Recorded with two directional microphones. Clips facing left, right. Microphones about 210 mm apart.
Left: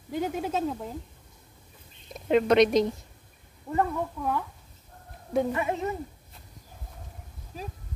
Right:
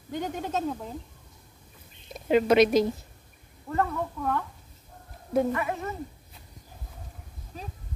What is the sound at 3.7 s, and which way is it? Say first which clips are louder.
Speech: left 1 dB; 10° left (ahead or behind).